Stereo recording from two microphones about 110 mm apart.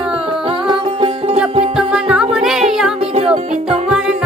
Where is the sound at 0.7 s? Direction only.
50° right (ahead or behind).